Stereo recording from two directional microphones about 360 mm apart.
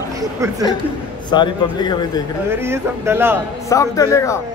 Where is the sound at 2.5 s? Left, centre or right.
Centre.